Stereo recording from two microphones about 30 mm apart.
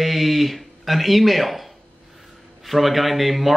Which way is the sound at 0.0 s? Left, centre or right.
Centre.